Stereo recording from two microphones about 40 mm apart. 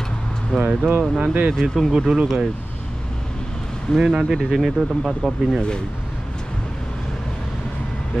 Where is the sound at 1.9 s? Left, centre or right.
Centre.